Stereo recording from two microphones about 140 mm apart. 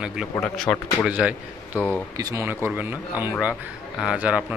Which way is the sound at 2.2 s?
25° right (ahead or behind).